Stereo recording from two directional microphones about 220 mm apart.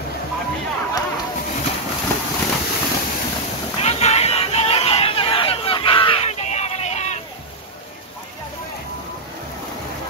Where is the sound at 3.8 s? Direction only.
30° left (ahead or behind).